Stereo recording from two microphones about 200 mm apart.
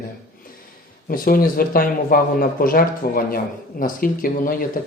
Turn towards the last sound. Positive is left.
turn(degrees=45)  # may be behind; listen again after turning